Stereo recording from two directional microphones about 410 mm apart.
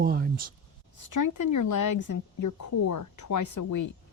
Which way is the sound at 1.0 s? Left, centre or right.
Left.